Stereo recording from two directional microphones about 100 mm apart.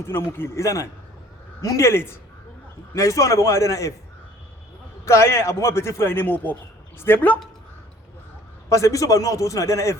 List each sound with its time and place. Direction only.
0.0 s a man's voice: 25° left (ahead or behind)
5.0 s a man's voice: 25° left (ahead or behind)
8.7 s a man's voice: 30° left (ahead or behind)